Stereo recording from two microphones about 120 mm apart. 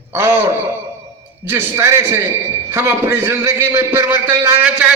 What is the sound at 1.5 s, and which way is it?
A man's voice, 20° right (ahead or behind).